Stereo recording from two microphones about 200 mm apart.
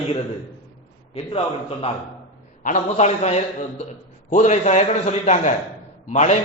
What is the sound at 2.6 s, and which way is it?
A man's voice, 35° left (ahead or behind).